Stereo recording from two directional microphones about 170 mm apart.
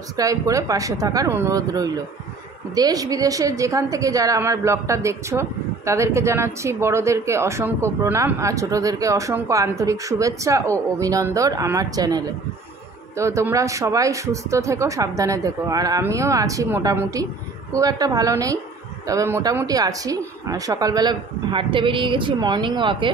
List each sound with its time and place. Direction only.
0.1 s a woman's voice: 20° right (ahead or behind)